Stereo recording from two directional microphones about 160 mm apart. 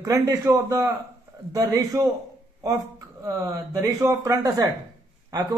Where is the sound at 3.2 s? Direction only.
20° right (ahead or behind).